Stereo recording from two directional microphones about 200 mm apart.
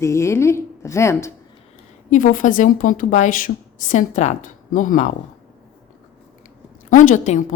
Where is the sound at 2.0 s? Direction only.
45° left (ahead or behind).